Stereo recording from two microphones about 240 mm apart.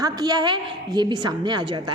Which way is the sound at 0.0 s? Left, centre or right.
Centre.